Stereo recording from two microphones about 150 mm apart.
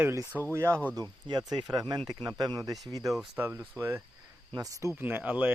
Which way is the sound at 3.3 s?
10° right (ahead or behind).